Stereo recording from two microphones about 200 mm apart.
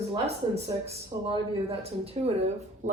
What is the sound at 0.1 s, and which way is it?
A woman's voice, 30° right (ahead or behind).